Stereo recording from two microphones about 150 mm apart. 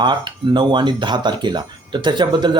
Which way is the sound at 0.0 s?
30° right (ahead or behind).